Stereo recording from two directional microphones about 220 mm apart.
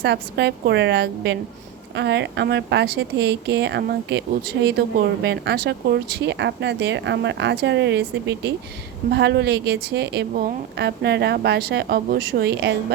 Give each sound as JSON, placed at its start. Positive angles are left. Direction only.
{"t": 0.0, "sound": "a woman's voice", "side_deg": -50}